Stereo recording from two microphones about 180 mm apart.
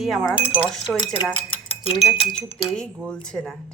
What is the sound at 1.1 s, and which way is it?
Cutlery, 30° left (ahead or behind).